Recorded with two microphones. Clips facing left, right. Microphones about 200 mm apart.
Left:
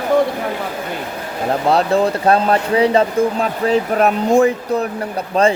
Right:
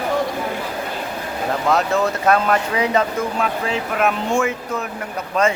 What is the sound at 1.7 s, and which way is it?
Speech, 35° left (ahead or behind).